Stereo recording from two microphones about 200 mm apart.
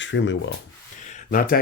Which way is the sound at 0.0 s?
65° left (ahead or behind).